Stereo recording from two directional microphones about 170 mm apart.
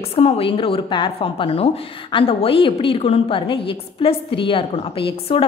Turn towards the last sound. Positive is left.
turn(degrees=35)  # may be behind; listen again after turning